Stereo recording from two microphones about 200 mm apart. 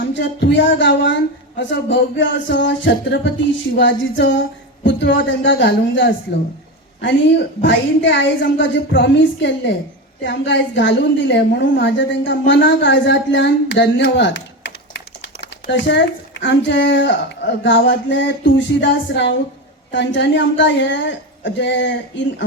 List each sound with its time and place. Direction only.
0.1 s a woman's voice: 65° left (ahead or behind)